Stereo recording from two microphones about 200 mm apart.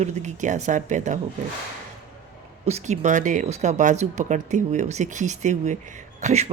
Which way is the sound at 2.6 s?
35° right (ahead or behind).